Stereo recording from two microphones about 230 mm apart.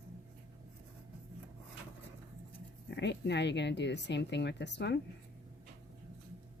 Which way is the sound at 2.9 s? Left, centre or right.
Left.